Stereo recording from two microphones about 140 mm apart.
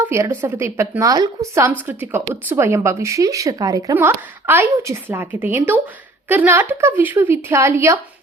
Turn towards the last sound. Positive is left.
turn(degrees=-20)  # may be behind; listen again after turning